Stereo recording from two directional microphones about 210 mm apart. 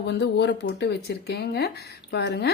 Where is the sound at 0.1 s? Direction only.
55° left (ahead or behind).